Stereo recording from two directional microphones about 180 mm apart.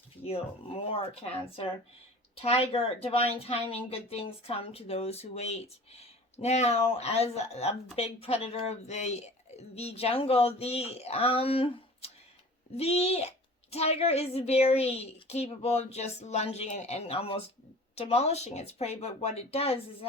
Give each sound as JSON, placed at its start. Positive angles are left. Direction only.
{"t": 0.3, "sound": "a woman's voice", "side_deg": 30}